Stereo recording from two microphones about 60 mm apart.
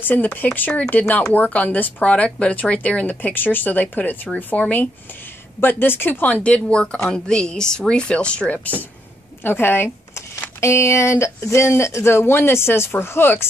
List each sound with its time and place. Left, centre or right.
0.0 s a woman's voice: left
9.4 s a woman's voice: left
10.6 s speech: left